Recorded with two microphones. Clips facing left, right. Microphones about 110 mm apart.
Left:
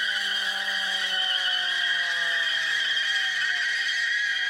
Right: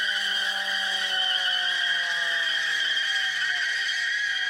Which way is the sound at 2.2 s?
25° right (ahead or behind).